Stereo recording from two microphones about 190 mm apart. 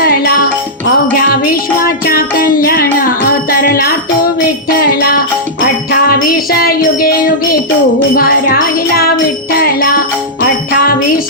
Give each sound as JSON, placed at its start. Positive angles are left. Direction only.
{"t": 1.3, "sound": "music", "side_deg": 50}
{"t": 8.1, "sound": "music", "side_deg": 50}